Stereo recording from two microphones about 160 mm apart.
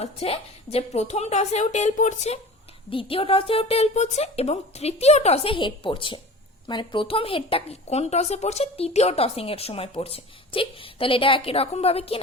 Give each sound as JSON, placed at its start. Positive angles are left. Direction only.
{"t": 0.0, "sound": "a woman's voice", "side_deg": 40}
{"t": 2.9, "sound": "a woman's voice", "side_deg": 35}